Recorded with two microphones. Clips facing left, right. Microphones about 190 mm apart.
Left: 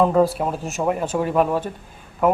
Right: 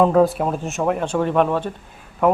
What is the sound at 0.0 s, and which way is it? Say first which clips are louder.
Speech: right 2 dB; centre (ahead or behind).